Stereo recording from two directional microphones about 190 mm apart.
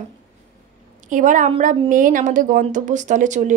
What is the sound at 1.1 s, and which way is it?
A woman's voice, 45° right (ahead or behind).